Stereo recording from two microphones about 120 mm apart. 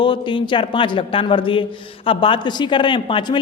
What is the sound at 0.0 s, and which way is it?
A man's voice, 40° left (ahead or behind).